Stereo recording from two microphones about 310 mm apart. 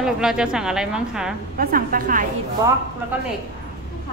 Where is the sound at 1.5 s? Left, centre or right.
Right.